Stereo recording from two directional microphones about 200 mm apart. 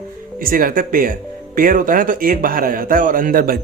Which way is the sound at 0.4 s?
45° right (ahead or behind).